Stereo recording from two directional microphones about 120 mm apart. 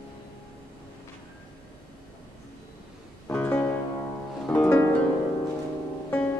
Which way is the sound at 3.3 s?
15° left (ahead or behind).